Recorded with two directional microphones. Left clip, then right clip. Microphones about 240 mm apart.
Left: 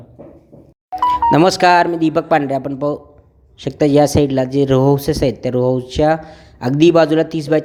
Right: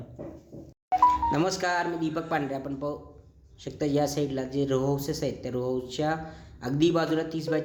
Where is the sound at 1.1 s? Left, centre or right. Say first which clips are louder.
Left 13 dB; left.